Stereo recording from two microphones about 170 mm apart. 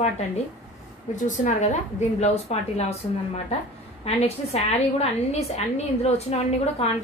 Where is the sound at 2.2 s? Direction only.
40° left (ahead or behind).